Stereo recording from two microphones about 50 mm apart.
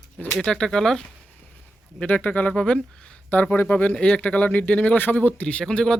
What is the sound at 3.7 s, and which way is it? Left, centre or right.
Speech, left.